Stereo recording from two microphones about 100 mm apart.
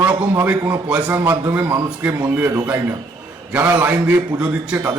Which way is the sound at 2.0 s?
15° right (ahead or behind).